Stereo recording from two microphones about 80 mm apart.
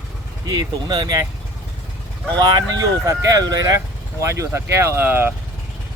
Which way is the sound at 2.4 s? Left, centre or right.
Right.